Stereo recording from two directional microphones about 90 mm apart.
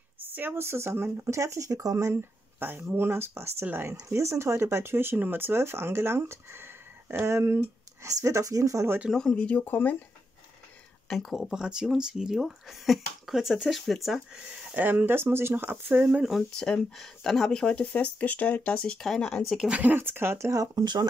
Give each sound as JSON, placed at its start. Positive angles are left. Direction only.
{"t": 0.2, "sound": "speech", "side_deg": -20}
{"t": 2.6, "sound": "speech", "side_deg": -25}
{"t": 9.1, "sound": "speech", "side_deg": 10}
{"t": 11.1, "sound": "speech", "side_deg": 5}
{"t": 14.3, "sound": "speech", "side_deg": -15}
{"t": 16.3, "sound": "speech", "side_deg": 5}
{"t": 19.6, "sound": "speech", "side_deg": -15}
{"t": 20.8, "sound": "speech", "side_deg": -55}